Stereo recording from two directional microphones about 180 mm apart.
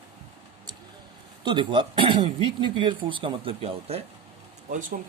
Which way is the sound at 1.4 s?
25° right (ahead or behind).